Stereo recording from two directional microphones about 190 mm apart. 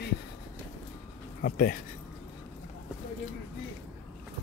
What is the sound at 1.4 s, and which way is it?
Speech, 50° left (ahead or behind).